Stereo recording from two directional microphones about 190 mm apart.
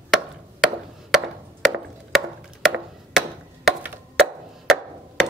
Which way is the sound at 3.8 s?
Centre (ahead or behind).